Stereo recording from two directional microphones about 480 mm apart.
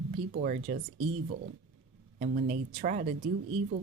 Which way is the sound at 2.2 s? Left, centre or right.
Centre.